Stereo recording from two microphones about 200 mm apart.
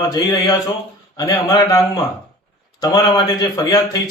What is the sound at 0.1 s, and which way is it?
A man's voice, 20° left (ahead or behind).